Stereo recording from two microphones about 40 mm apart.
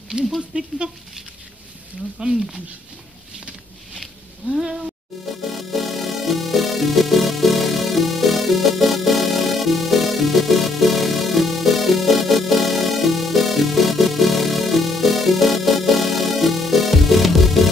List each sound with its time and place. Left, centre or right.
0.5 s speech: right
2.2 s speech: centre
3.3 s a sound: centre
5.3 s music: centre